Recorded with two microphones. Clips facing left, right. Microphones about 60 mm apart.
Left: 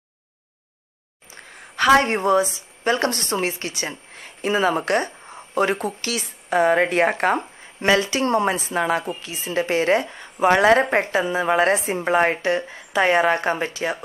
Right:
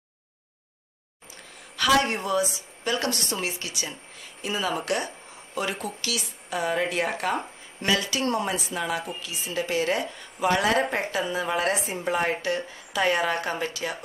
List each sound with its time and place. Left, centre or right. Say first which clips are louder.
1.3 s a woman's voice: left 6 dB; left
7.8 s a woman's voice: left 6 dB; left